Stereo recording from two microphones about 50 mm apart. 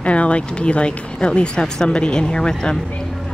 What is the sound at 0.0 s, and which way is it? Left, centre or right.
Speech, left.